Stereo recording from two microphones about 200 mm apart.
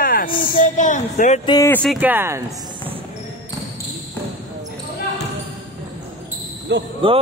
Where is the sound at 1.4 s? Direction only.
20° left (ahead or behind).